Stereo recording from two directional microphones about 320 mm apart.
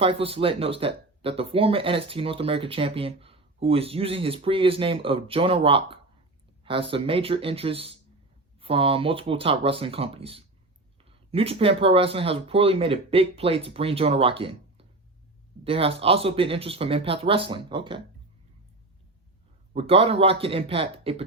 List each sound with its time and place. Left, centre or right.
0.0 s speech: centre
19.7 s speech: centre